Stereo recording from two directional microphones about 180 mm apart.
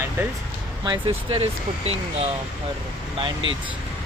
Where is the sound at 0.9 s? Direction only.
30° right (ahead or behind).